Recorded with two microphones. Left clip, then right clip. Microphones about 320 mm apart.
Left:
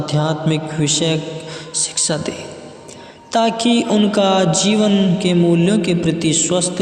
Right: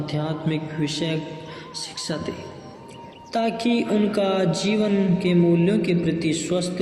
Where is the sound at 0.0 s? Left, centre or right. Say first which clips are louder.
Left 8 dB; left.